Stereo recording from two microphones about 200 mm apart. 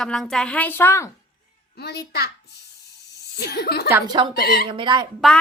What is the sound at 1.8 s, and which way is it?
Speech, 55° left (ahead or behind).